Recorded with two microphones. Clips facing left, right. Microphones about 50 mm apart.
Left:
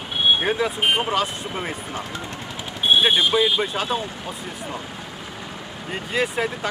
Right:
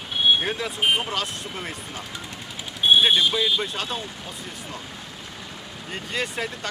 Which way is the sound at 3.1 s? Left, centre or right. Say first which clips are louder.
Left 3 dB; centre.